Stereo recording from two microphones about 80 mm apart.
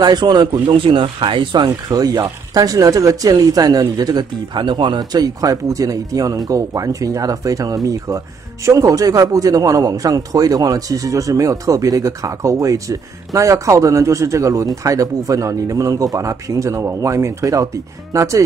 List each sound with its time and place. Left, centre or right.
0.0 s speech: right
1.9 s a man's voice: right